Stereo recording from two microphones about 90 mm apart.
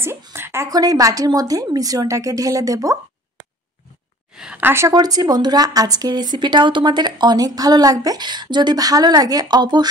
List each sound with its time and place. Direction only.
0.3 s a sound: 30° right (ahead or behind)
0.7 s a woman's voice: 45° right (ahead or behind)
4.6 s speech: 25° right (ahead or behind)
4.9 s speech: 45° right (ahead or behind)